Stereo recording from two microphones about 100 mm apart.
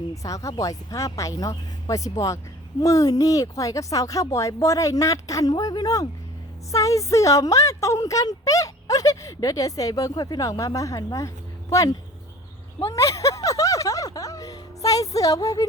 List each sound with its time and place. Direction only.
0.1 s speech: 35° left (ahead or behind)